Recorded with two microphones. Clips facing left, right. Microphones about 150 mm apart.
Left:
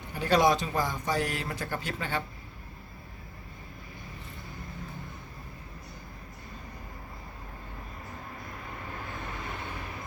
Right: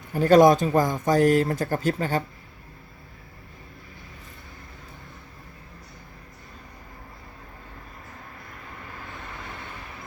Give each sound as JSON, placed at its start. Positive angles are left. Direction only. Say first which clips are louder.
{"t": 0.1, "sound": "speech", "louder": "right 9 dB", "side_deg": -45}